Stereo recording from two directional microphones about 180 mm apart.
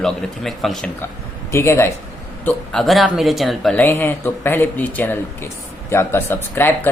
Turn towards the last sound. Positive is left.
turn(degrees=10)  # may be behind; listen again after turning